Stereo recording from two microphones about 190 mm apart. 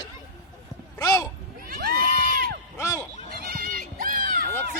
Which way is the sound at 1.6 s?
50° right (ahead or behind).